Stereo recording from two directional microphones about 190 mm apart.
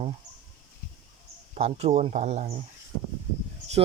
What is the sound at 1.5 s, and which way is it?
Speech, 35° right (ahead or behind).